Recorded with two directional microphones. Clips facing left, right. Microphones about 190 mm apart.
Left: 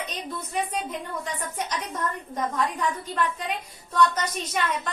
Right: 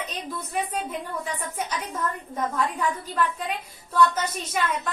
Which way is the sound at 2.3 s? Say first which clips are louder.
Even; 5° right (ahead or behind).